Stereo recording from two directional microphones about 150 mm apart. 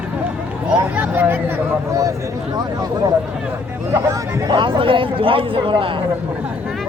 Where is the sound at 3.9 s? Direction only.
20° right (ahead or behind).